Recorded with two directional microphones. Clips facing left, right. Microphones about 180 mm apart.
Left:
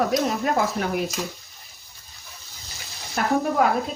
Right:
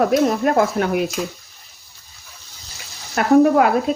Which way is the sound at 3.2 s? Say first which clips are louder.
Right 5 dB; 80° right.